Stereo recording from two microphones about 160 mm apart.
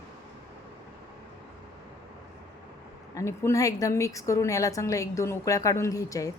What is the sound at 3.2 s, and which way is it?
A woman's voice, 20° left (ahead or behind).